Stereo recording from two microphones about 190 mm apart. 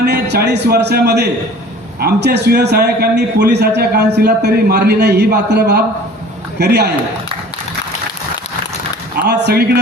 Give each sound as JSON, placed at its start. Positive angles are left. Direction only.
{"t": 0.0, "sound": "a man's voice", "side_deg": -60}
{"t": 9.2, "sound": "a man's voice", "side_deg": -60}